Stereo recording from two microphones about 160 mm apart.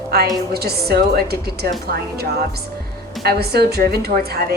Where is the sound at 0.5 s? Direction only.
80° right.